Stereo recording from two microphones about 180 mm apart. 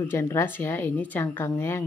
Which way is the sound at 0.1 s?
15° left (ahead or behind).